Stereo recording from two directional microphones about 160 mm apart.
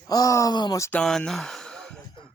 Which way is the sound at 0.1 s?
20° left (ahead or behind).